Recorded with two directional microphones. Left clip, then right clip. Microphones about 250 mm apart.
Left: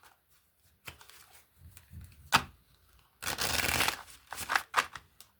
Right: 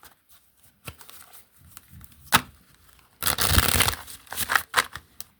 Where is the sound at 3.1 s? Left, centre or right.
Right.